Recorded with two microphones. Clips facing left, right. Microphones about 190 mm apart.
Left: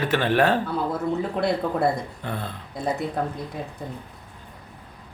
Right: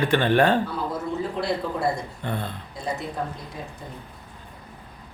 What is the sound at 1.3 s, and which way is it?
Speech, 55° left (ahead or behind).